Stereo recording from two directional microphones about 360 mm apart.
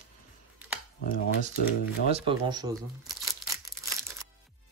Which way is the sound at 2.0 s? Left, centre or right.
Centre.